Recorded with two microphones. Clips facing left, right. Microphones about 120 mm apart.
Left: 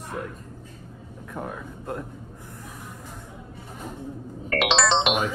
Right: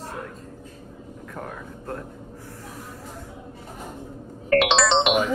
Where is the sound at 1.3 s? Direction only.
15° left (ahead or behind).